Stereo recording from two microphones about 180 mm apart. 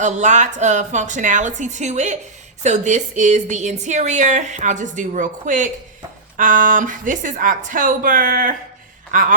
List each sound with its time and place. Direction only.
0.0 s a woman's voice: 40° right (ahead or behind)